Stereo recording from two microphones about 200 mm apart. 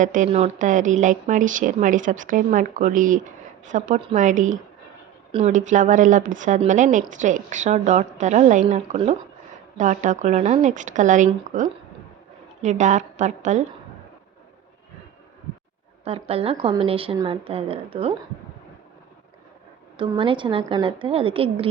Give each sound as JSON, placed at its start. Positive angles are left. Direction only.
{"t": 0.0, "sound": "a woman's voice", "side_deg": -40}
{"t": 12.6, "sound": "a woman's voice", "side_deg": -35}
{"t": 16.0, "sound": "a woman's voice", "side_deg": -30}
{"t": 20.0, "sound": "a woman's voice", "side_deg": -25}